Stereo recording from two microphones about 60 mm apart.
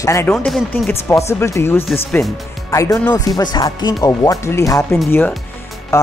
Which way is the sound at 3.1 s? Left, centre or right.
Left.